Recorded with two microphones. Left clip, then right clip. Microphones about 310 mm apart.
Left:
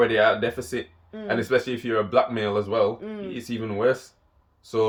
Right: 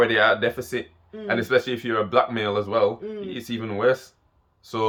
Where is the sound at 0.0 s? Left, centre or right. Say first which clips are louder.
Right 1 dB; centre.